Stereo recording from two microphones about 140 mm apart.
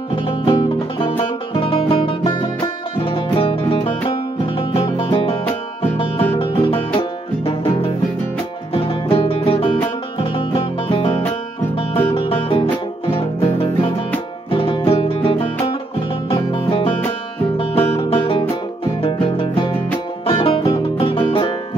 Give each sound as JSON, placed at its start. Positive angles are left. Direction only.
{"t": 0.1, "sound": "music", "side_deg": 35}
{"t": 20.6, "sound": "music", "side_deg": 25}
{"t": 21.3, "sound": "music", "side_deg": 40}